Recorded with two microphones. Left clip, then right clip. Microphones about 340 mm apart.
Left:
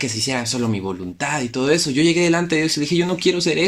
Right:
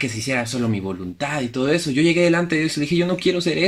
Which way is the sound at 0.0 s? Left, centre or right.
Centre.